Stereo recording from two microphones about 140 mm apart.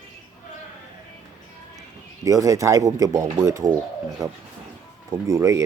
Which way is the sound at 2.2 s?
20° right (ahead or behind).